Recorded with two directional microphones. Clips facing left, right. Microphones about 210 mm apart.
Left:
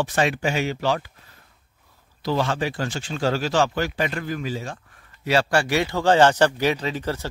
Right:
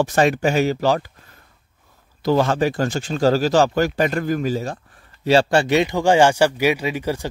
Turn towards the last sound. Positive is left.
turn(degrees=-10)  # may be behind; listen again after turning